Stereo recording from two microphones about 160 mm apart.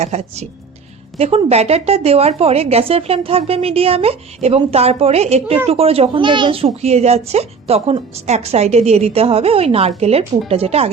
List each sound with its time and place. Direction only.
0.0 s speech: 40° right (ahead or behind)